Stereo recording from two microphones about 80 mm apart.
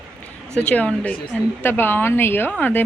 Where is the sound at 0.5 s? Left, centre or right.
Centre.